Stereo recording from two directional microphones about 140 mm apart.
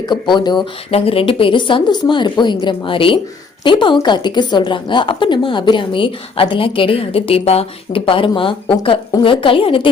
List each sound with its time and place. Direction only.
0.0 s a woman's voice: 30° left (ahead or behind)
0.9 s a woman's voice: 45° left (ahead or behind)